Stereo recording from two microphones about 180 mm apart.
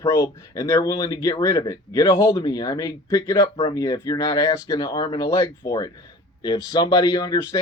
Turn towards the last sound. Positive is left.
turn(degrees=20)  # may be behind; listen again after turning